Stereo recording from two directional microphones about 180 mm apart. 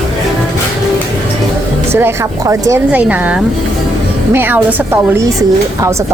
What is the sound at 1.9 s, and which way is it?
Speech, 15° right (ahead or behind).